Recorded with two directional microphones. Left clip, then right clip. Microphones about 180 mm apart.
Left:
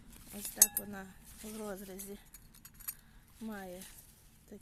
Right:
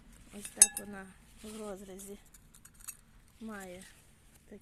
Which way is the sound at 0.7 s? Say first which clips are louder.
Right 1 dB; 5° left (ahead or behind).